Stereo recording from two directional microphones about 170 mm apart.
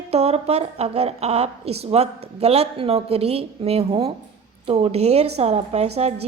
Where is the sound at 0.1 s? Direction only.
40° right (ahead or behind).